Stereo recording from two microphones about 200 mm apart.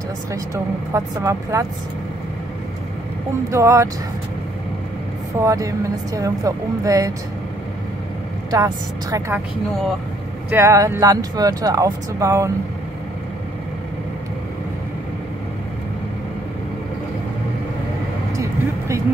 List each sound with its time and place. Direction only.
0.9 s speech: 15° right (ahead or behind)
3.4 s speech: 15° right (ahead or behind)
5.4 s speech: 15° right (ahead or behind)
8.5 s speech: 15° right (ahead or behind)
10.5 s speech: 15° right (ahead or behind)
18.3 s vehicle: 15° right (ahead or behind)